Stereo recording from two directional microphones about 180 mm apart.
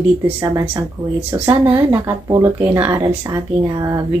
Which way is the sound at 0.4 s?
20° right (ahead or behind).